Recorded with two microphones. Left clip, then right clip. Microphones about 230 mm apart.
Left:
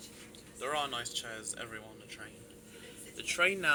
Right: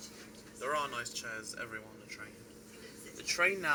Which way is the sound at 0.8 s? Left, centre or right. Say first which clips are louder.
Left 1 dB; left.